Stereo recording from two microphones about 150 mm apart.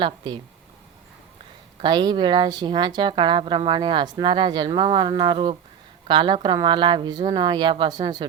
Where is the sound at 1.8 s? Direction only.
30° right (ahead or behind).